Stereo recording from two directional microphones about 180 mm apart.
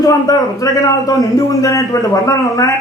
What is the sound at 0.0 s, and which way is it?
A man's voice, 20° left (ahead or behind).